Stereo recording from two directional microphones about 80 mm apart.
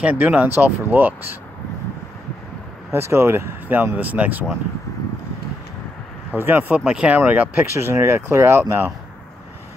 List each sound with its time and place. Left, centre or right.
0.0 s speech: centre
2.9 s speech: right
6.3 s speech: right
6.8 s speech: centre
7.7 s speech: right